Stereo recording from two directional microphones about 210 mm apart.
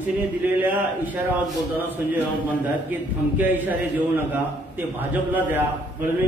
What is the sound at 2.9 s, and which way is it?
Speech, 10° right (ahead or behind).